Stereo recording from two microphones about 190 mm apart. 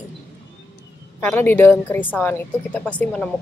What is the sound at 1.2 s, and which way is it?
Speech, 10° left (ahead or behind).